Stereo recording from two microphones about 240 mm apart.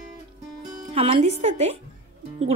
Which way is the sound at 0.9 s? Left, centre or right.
Right.